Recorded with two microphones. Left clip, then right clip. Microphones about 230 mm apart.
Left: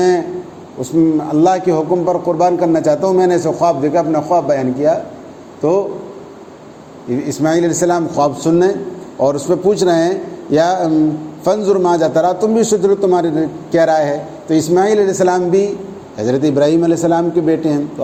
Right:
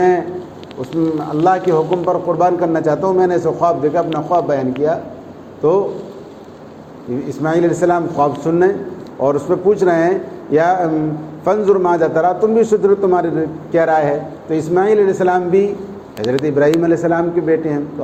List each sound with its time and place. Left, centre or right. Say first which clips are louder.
1.3 s a man's voice: left 1 dB; left
7.3 s a man's voice: left 1 dB; left